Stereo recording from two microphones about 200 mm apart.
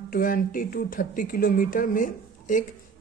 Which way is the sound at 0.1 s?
45° left (ahead or behind).